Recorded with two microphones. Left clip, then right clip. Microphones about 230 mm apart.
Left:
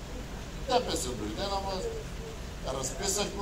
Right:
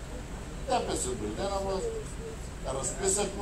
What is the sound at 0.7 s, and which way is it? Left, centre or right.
Speech, left.